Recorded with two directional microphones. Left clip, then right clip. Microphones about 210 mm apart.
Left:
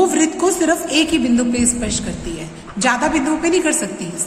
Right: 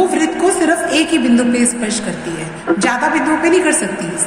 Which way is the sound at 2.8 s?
50° left (ahead or behind).